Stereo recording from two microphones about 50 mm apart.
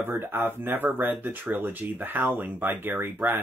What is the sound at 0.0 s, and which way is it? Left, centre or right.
Speech, right.